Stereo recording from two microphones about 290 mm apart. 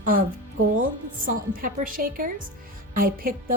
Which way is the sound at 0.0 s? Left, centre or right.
Right.